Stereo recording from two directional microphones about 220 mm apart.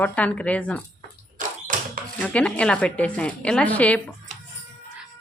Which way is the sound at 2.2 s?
5° left (ahead or behind).